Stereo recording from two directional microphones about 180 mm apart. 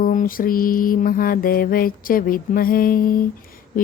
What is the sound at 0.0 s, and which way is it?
Mantra, 50° left (ahead or behind).